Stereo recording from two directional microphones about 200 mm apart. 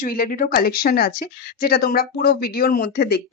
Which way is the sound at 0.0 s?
45° left (ahead or behind).